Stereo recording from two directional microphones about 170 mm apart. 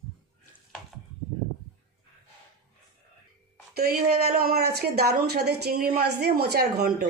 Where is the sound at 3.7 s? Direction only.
65° right (ahead or behind).